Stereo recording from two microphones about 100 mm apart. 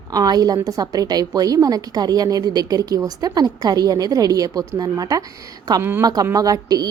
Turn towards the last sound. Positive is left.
turn(degrees=-40)  # may be behind; listen again after turning